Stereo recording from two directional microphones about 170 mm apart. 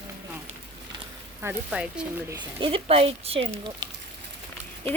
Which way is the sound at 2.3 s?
25° right (ahead or behind).